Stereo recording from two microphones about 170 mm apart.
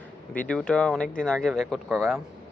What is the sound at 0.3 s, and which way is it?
Speech, 5° left (ahead or behind).